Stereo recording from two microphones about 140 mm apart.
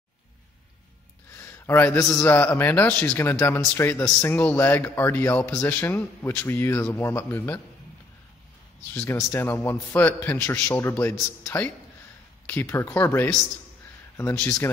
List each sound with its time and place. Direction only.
1.3 s a sound: 15° left (ahead or behind)
2.1 s a man's voice: 15° left (ahead or behind)
9.0 s a man's voice: 15° left (ahead or behind)